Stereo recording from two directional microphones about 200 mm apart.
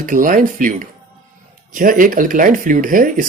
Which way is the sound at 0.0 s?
45° right (ahead or behind).